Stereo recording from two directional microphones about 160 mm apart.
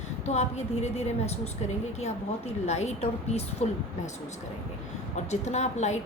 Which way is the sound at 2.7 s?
45° left (ahead or behind).